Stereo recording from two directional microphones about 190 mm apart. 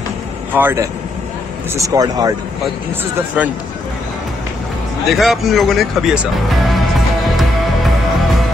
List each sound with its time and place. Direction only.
0.6 s speech: 10° right (ahead or behind)
3.4 s speech: 10° right (ahead or behind)
5.1 s speech: centre (ahead or behind)